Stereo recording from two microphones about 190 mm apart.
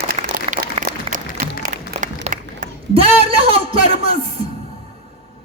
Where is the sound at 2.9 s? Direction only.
30° right (ahead or behind).